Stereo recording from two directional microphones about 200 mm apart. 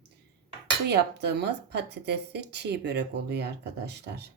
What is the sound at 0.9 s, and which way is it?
Speech, 60° right (ahead or behind).